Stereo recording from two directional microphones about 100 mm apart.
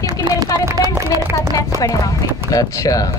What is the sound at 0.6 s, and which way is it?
Speech, 30° right (ahead or behind).